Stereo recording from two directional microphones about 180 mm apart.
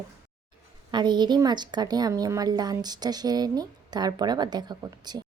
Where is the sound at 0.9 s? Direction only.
25° right (ahead or behind).